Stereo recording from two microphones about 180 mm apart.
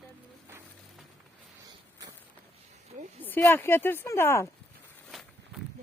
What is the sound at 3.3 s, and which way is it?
Speech, 10° left (ahead or behind).